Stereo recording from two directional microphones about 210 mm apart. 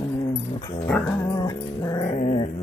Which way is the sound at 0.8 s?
10° left (ahead or behind).